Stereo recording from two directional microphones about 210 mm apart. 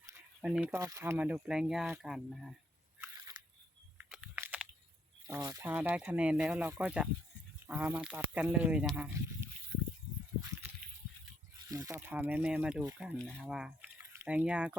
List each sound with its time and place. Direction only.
0.4 s speech: centre (ahead or behind)
0.7 s speech: 15° right (ahead or behind)
3.2 s a sound: 20° right (ahead or behind)
3.9 s a sound: 5° right (ahead or behind)
5.2 s speech: 15° right (ahead or behind)
11.7 s speech: 15° right (ahead or behind)